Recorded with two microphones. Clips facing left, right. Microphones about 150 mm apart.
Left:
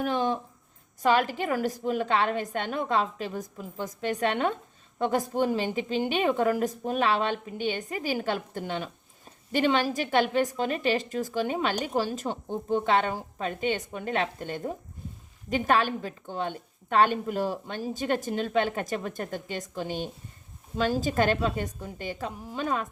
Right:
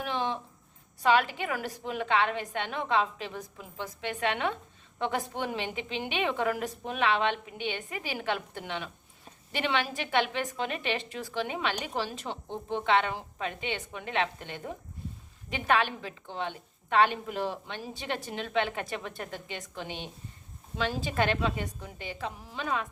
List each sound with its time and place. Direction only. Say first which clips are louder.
0.0 s a woman's voice: left 5 dB; 45° left (ahead or behind)